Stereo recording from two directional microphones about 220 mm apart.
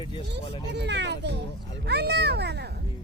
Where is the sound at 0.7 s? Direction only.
50° right (ahead or behind).